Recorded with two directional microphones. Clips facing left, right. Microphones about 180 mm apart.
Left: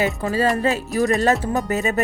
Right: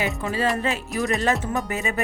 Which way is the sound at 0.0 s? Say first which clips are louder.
Left 4 dB; 40° left (ahead or behind).